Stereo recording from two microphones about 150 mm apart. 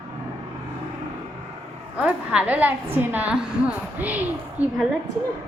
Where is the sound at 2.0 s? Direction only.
10° right (ahead or behind).